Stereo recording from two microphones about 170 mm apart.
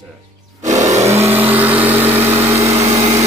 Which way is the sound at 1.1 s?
15° right (ahead or behind).